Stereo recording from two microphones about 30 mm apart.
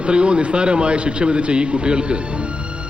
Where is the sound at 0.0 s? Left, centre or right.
Right.